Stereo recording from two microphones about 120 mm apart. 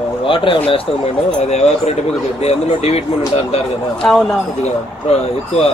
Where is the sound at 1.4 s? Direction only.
65° left (ahead or behind).